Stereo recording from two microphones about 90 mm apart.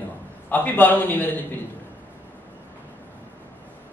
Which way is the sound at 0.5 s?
20° left (ahead or behind).